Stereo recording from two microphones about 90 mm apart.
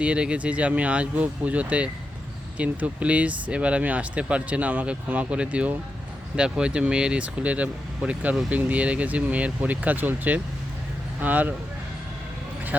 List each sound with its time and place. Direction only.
0.0 s speech: 10° right (ahead or behind)